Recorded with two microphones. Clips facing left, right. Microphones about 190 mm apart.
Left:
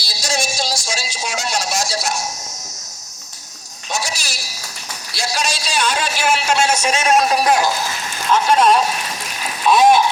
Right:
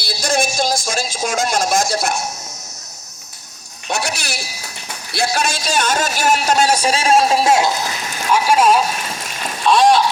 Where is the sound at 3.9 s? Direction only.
60° right (ahead or behind).